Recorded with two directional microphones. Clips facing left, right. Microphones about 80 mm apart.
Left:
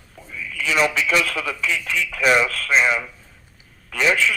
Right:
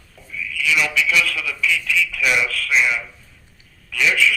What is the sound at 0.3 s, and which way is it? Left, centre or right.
A man's voice, left.